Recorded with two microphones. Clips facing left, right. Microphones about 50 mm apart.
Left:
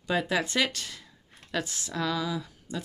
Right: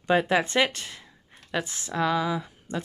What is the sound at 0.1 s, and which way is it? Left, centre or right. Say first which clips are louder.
Speech: right 5 dB; right.